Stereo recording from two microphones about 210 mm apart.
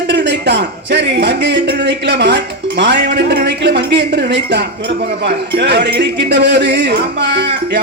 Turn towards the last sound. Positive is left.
turn(degrees=-55)  # may be behind; listen again after turning